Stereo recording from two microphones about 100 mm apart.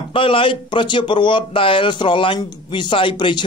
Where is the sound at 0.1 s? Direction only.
65° left (ahead or behind).